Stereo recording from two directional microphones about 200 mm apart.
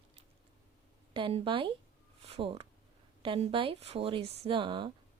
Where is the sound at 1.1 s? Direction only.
25° right (ahead or behind).